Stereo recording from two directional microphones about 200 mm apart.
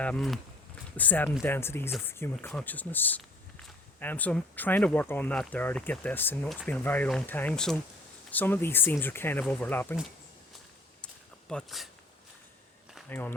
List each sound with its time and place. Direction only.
0.0 s speech: 5° left (ahead or behind)
11.0 s a sound: 5° left (ahead or behind)
13.1 s speech: 10° left (ahead or behind)